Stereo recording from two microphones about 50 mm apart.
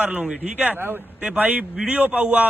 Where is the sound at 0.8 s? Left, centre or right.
Right.